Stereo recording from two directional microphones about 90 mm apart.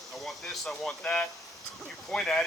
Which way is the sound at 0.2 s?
5° left (ahead or behind).